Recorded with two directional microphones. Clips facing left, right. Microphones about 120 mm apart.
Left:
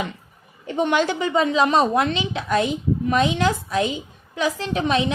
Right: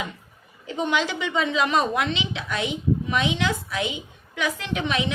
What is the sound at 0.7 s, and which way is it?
A woman's voice, 55° left (ahead or behind).